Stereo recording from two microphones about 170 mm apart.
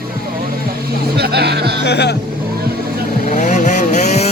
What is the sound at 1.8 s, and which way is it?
Speech, 85° left.